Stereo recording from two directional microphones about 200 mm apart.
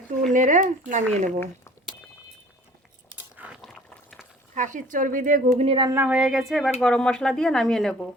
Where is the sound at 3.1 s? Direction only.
5° right (ahead or behind).